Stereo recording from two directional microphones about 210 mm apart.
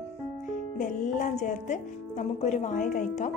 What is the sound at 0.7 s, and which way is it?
A woman's voice, 40° left (ahead or behind).